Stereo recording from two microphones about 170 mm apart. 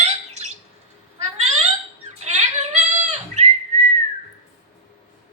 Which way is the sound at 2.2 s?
40° right (ahead or behind).